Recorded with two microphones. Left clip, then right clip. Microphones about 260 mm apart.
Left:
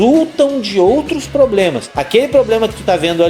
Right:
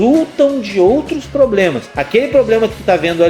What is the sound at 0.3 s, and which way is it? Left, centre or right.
Speech, left.